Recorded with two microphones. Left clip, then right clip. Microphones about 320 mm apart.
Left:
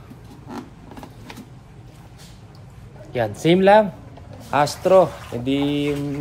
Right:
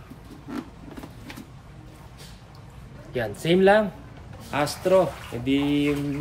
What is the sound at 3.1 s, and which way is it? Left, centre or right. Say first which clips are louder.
Speech: left 4 dB; centre.